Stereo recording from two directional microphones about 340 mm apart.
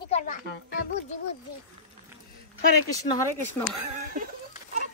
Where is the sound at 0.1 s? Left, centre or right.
Left.